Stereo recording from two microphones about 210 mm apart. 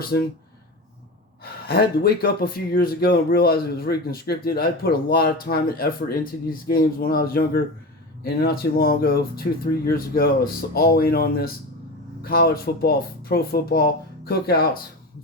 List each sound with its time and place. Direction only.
0.1 s speech: 50° left (ahead or behind)
1.6 s speech: 50° left (ahead or behind)